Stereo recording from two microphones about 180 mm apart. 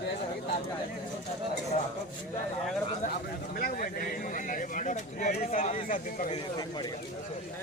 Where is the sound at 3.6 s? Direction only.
50° left (ahead or behind).